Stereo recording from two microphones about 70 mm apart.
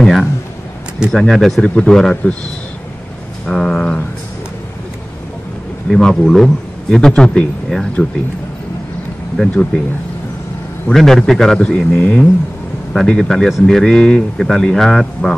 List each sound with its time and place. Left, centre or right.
0.0 s a man's voice: centre
3.4 s a man's voice: centre
5.9 s a man's voice: centre
9.4 s a man's voice: centre
10.9 s a man's voice: centre
11.6 s a man's voice: centre
12.9 s a man's voice: centre